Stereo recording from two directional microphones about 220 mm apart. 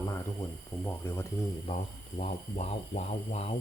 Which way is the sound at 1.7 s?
30° left (ahead or behind).